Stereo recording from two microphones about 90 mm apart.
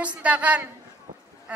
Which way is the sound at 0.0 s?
15° right (ahead or behind).